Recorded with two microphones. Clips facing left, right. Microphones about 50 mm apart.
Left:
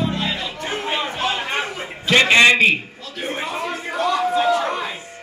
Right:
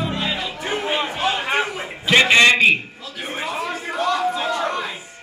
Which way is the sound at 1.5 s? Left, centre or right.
Centre.